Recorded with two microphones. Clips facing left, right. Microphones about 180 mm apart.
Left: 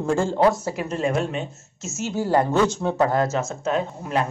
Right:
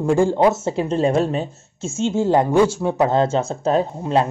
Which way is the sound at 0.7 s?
30° right (ahead or behind).